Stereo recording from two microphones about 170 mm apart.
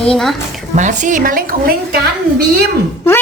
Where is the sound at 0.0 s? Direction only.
5° left (ahead or behind).